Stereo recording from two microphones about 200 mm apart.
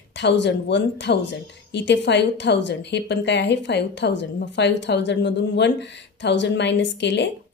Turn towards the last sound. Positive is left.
turn(degrees=60)  # may be behind; listen again after turning